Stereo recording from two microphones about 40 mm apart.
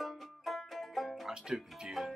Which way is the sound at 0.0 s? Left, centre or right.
Centre.